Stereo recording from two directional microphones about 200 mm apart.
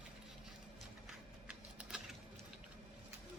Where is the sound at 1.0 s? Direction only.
5° right (ahead or behind).